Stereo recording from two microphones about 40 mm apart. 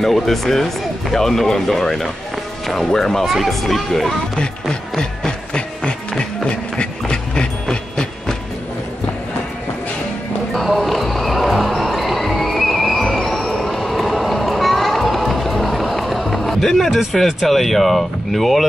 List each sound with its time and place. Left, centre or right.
0.0 s speech: centre
3.3 s speech: centre
4.6 s music: centre
10.5 s music: centre
17.0 s speech: centre